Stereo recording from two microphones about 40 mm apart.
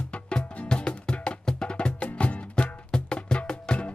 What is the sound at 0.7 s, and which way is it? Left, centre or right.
Music, left.